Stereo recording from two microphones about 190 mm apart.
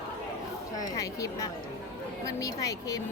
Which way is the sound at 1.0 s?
15° left (ahead or behind).